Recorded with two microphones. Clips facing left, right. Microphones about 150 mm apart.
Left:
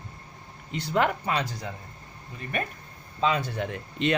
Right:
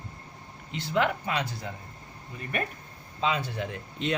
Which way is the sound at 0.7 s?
45° left (ahead or behind).